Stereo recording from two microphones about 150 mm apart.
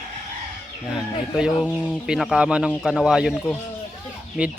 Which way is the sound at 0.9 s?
5° right (ahead or behind).